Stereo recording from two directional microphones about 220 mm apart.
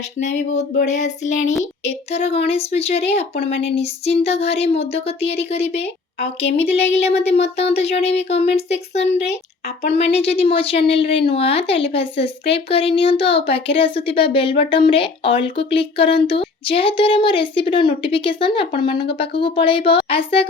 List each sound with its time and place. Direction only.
0.2 s a sound: 30° left (ahead or behind)
2.1 s a woman's voice: 25° left (ahead or behind)
3.3 s speech: 50° left (ahead or behind)
3.8 s a woman's voice: 25° left (ahead or behind)
10.2 s a woman's voice: 25° left (ahead or behind)